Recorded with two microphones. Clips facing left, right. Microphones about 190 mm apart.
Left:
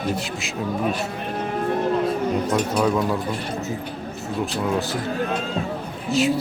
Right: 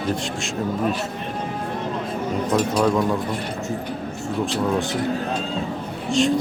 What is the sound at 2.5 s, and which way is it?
Speech, 5° left (ahead or behind).